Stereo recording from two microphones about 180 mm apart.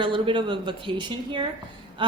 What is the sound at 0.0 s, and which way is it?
A woman's voice, 30° right (ahead or behind).